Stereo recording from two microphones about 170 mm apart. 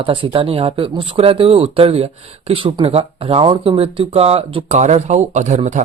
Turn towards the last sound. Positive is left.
turn(degrees=-45)  # may be behind; listen again after turning